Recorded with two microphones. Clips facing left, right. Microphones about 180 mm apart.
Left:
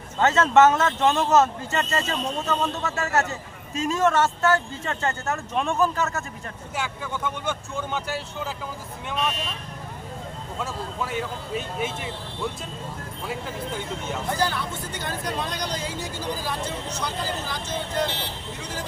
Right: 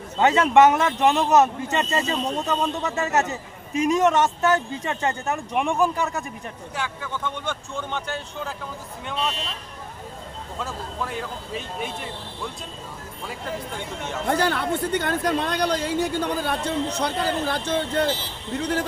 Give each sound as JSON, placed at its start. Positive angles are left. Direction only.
{"t": 0.2, "sound": "speech", "side_deg": -15}
{"t": 6.8, "sound": "speech", "side_deg": 10}
{"t": 10.6, "sound": "speech", "side_deg": 0}
{"t": 14.3, "sound": "speech", "side_deg": -60}